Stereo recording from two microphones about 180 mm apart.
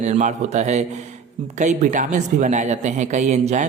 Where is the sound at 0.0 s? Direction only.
45° right (ahead or behind).